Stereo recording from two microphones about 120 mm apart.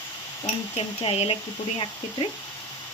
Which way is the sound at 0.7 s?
55° left (ahead or behind).